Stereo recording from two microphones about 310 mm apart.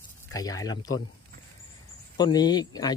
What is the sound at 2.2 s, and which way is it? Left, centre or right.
Speech, centre.